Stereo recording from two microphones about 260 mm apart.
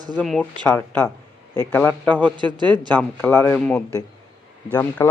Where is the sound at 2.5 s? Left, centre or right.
Centre.